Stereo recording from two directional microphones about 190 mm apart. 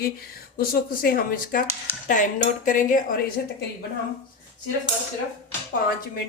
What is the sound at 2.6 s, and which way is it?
Speech, 40° left (ahead or behind).